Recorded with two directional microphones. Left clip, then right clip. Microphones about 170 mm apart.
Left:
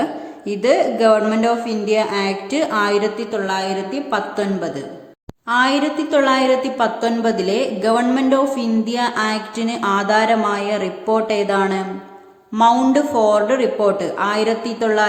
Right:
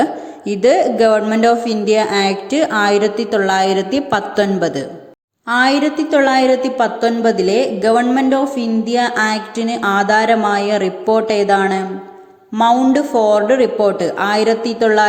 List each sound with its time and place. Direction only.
0.0 s a woman's voice: 20° right (ahead or behind)
3.3 s a woman's voice: 40° right (ahead or behind); by 15.0 s 20° right (ahead or behind)